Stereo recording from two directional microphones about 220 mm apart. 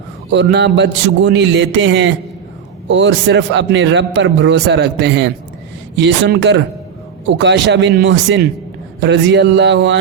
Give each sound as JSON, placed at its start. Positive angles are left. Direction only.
{"t": 0.5, "sound": "a man's voice", "side_deg": -50}